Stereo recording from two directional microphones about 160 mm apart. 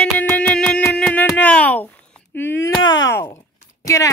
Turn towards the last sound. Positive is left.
turn(degrees=20)  # may be behind; listen again after turning